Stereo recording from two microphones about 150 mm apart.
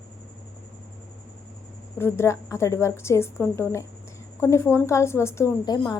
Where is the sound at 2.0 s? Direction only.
15° left (ahead or behind).